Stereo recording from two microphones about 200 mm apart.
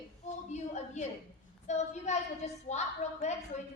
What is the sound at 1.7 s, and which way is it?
A woman's voice, 35° left (ahead or behind).